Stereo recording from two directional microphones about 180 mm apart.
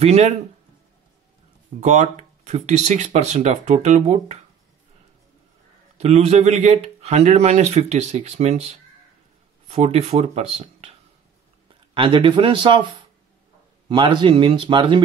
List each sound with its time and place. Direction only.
0.0 s speech: 35° right (ahead or behind)
1.8 s speech: 40° right (ahead or behind)
5.9 s speech: 40° right (ahead or behind)